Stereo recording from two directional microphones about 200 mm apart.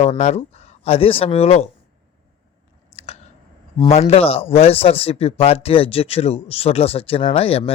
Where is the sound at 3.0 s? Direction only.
30° left (ahead or behind).